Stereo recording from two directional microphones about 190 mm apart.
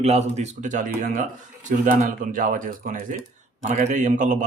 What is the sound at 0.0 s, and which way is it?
Speech, 35° right (ahead or behind).